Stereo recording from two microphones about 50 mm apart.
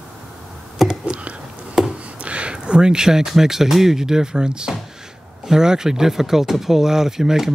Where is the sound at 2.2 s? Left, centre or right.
Right.